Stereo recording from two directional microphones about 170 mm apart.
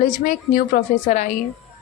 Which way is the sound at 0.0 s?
50° left (ahead or behind).